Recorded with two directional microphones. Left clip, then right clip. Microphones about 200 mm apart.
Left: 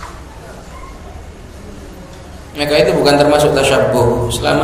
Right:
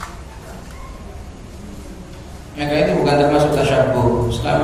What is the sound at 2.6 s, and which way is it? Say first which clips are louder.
A man's voice: left 5 dB; 45° left (ahead or behind).